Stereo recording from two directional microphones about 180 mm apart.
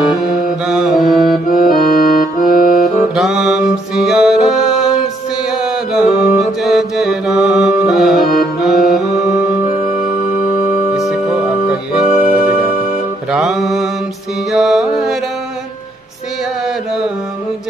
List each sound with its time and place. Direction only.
0.4 s music: centre (ahead or behind)
1.5 s accordion: 55° left (ahead or behind)
3.2 s music: centre (ahead or behind)
5.5 s mantra: 5° right (ahead or behind)
6.6 s music: centre (ahead or behind)
11.0 s music: centre (ahead or behind)
12.1 s music: 45° left (ahead or behind)
13.3 s music: centre (ahead or behind)